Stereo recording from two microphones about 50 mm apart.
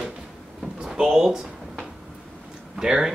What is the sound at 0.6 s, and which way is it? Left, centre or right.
Speech, centre.